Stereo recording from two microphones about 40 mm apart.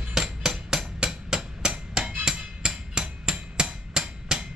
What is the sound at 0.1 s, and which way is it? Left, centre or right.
Hammer, centre.